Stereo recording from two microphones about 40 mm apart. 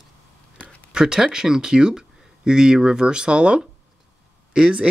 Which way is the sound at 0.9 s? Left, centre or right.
Centre.